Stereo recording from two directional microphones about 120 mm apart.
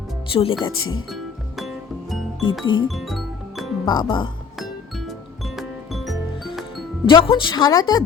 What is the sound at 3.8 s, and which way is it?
Speech, 40° left (ahead or behind).